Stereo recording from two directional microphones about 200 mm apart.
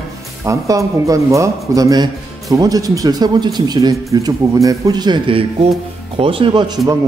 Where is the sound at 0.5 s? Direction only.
15° right (ahead or behind).